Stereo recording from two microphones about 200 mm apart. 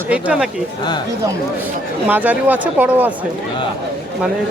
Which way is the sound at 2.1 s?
10° right (ahead or behind).